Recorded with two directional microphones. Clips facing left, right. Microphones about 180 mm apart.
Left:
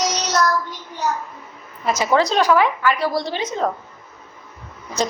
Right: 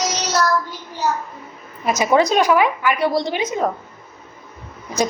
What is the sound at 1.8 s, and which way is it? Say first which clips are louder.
A woman's voice: right 2 dB; 15° right (ahead or behind).